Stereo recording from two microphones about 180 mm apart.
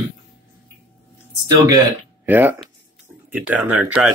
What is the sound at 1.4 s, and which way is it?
Speech, 20° right (ahead or behind).